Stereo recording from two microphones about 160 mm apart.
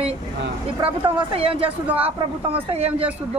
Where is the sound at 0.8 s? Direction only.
35° right (ahead or behind).